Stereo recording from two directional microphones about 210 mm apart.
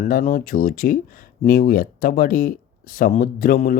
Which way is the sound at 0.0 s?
40° left (ahead or behind).